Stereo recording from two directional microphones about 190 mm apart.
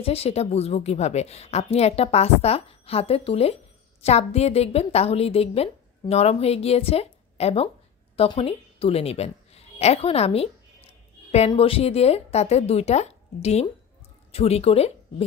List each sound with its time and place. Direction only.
0.0 s a woman's voice: 30° left (ahead or behind)